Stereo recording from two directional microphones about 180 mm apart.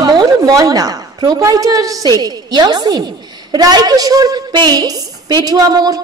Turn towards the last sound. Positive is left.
turn(degrees=-20)  # may be behind; listen again after turning